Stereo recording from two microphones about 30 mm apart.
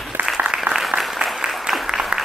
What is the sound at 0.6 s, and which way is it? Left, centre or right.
Applause, centre.